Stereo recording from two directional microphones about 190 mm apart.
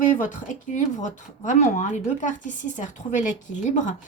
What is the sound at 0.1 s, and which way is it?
Speech, 40° left (ahead or behind).